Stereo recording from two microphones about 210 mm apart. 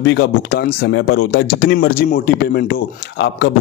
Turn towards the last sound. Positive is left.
turn(degrees=55)  # may be behind; listen again after turning